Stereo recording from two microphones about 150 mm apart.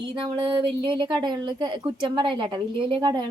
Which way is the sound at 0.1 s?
30° right (ahead or behind).